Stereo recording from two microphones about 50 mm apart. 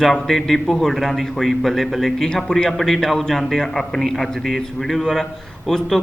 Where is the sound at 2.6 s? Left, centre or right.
Centre.